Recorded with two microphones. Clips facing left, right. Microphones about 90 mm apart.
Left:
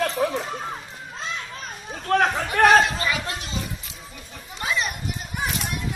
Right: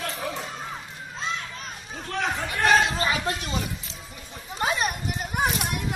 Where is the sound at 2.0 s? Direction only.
55° left (ahead or behind).